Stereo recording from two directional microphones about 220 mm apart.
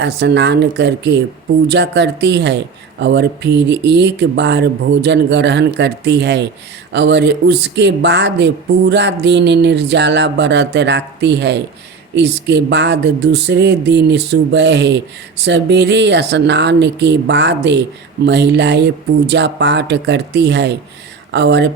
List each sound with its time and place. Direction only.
0.0 s speech: 50° right (ahead or behind)